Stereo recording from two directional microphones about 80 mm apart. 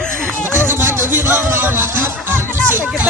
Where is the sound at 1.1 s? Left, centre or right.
Right.